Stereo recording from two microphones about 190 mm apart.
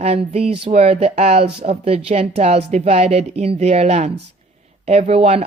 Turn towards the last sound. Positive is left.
turn(degrees=-30)  # may be behind; listen again after turning